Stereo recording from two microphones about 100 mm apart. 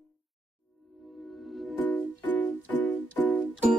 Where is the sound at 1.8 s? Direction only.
15° left (ahead or behind).